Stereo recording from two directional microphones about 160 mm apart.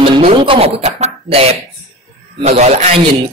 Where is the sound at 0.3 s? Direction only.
35° right (ahead or behind).